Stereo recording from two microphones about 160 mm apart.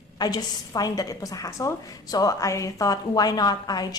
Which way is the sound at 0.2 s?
25° left (ahead or behind).